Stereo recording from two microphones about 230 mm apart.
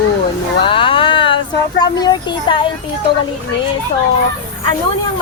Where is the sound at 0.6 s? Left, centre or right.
Left.